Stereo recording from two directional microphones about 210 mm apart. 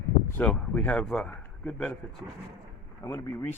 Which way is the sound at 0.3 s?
5° left (ahead or behind).